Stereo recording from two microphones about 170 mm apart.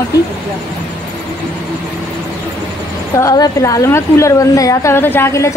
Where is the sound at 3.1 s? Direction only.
20° left (ahead or behind).